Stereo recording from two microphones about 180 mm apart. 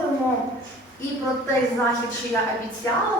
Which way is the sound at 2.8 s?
15° left (ahead or behind).